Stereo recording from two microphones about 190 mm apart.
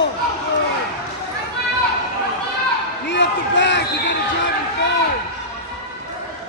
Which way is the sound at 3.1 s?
70° left (ahead or behind).